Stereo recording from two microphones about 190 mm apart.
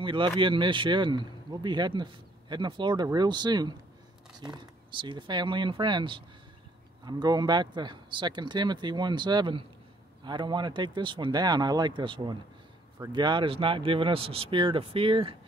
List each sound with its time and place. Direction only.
0.0 s speech: 25° right (ahead or behind)